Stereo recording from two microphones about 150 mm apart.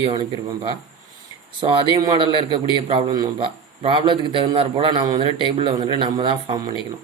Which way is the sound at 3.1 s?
30° right (ahead or behind).